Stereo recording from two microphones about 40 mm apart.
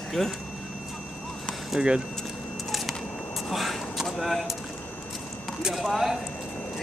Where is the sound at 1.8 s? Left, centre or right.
Right.